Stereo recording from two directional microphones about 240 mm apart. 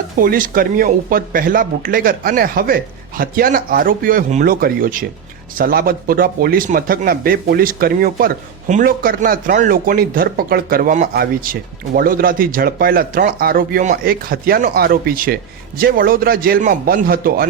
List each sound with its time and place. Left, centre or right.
0.2 s a man's voice: right